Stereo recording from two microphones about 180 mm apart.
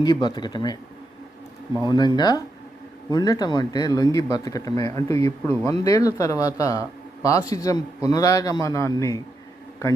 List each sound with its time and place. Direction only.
0.0 s speech: 25° left (ahead or behind)
1.9 s speech: 25° left (ahead or behind)